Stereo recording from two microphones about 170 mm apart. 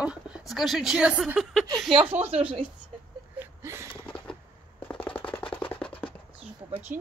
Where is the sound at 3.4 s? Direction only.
15° right (ahead or behind).